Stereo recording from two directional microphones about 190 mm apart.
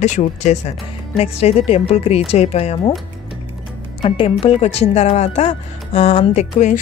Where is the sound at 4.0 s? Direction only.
30° left (ahead or behind).